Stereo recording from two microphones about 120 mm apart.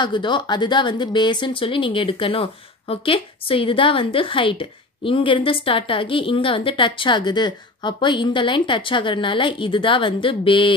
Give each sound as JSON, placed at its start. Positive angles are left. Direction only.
{"t": 0.0, "sound": "speech", "side_deg": 40}